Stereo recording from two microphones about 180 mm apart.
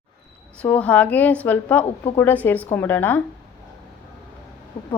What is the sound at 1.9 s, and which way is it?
Speech, 35° left (ahead or behind).